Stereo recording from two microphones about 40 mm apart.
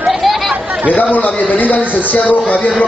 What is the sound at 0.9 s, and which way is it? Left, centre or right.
A man's voice, left.